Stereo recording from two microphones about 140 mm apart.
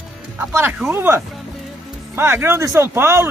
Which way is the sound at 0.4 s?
15° right (ahead or behind).